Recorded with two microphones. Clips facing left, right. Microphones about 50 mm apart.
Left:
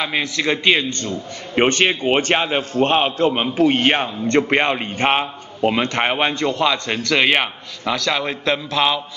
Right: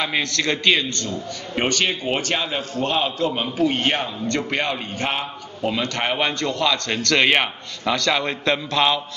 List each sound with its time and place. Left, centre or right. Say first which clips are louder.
0.0 s a man's voice: left 2 dB; centre